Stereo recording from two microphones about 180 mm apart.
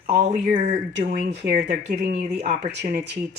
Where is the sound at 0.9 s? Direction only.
70° right (ahead or behind).